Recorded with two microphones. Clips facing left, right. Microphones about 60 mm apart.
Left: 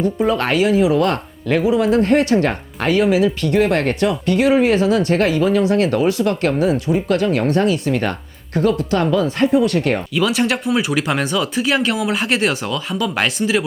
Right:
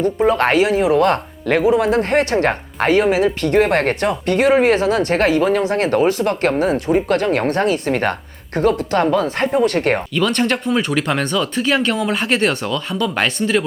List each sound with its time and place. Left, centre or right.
0.3 s speech: right
10.2 s speech: centre